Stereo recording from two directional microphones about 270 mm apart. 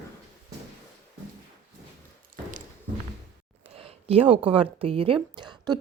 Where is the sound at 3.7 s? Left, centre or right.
Right.